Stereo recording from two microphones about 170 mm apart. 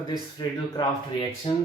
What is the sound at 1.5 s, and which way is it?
Speech, 35° left (ahead or behind).